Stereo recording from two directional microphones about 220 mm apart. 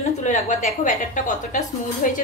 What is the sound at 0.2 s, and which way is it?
A woman's voice, 35° left (ahead or behind).